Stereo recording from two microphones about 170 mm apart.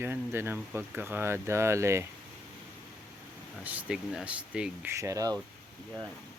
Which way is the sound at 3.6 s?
10° right (ahead or behind).